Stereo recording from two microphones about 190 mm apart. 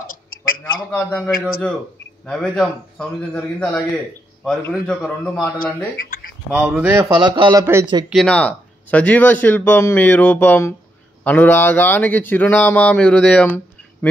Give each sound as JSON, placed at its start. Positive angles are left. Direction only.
{"t": 0.7, "sound": "a man's voice", "side_deg": 5}
{"t": 6.5, "sound": "a man's voice", "side_deg": -10}
{"t": 8.1, "sound": "speech", "side_deg": 5}